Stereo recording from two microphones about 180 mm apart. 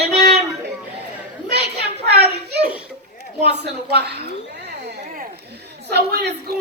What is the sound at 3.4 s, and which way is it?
Speech, 65° right (ahead or behind).